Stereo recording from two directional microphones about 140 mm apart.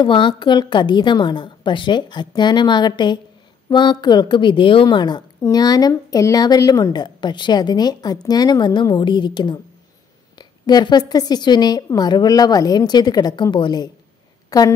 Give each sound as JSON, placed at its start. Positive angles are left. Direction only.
{"t": 0.0, "sound": "a woman's voice", "side_deg": 35}